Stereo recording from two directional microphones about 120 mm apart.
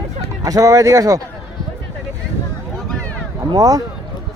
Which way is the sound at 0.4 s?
30° right (ahead or behind).